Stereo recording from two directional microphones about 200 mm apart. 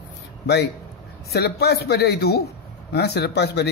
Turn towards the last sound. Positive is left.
turn(degrees=55)  # may be behind; listen again after turning